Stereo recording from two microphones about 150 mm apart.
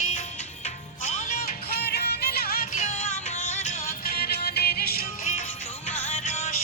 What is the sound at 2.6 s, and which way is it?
Music, 45° left (ahead or behind).